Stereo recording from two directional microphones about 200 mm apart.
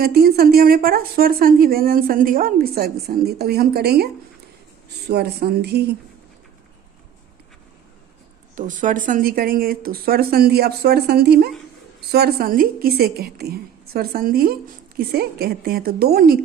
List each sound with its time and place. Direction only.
0.0 s a woman's voice: 50° right (ahead or behind)
8.5 s a woman's voice: 40° right (ahead or behind)